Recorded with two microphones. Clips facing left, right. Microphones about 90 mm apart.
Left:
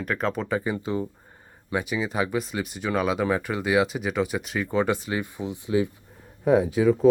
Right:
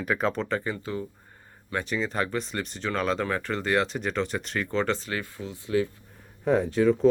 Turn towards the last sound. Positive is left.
turn(degrees=5)  # may be behind; listen again after turning